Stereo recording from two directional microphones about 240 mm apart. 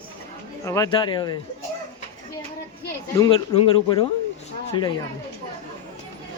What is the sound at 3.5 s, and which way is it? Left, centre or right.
Speech, left.